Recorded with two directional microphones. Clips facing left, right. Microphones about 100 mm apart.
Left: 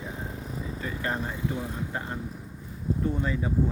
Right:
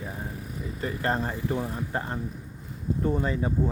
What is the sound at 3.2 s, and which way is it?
Speech, 30° right (ahead or behind).